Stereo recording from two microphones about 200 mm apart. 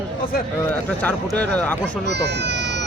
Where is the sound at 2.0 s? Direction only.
55° right (ahead or behind).